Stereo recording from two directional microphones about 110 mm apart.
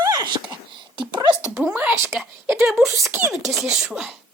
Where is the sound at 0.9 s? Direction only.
45° right (ahead or behind).